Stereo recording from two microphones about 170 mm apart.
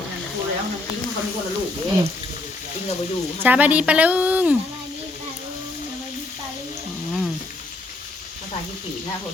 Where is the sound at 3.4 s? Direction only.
10° right (ahead or behind).